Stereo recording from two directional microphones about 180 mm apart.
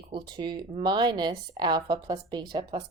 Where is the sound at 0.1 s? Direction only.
25° right (ahead or behind).